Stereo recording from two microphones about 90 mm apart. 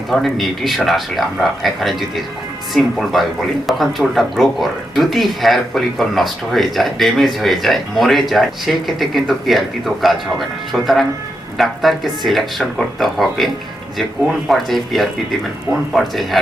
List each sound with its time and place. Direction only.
0.1 s speech: centre (ahead or behind)